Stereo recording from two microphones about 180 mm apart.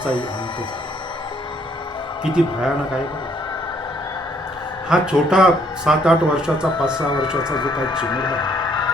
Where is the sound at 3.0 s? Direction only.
25° left (ahead or behind).